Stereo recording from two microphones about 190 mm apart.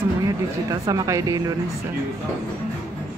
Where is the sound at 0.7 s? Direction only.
20° right (ahead or behind).